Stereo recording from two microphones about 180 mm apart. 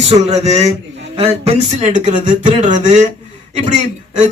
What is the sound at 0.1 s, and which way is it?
Speech, 35° right (ahead or behind).